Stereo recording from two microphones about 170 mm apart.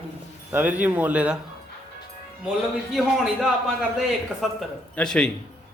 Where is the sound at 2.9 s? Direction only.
Centre (ahead or behind).